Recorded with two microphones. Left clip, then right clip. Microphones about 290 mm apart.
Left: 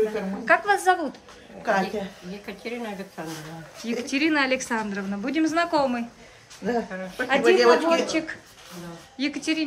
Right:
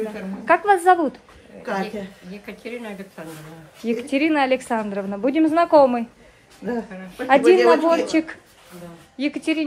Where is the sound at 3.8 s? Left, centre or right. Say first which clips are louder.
Right 4 dB; centre.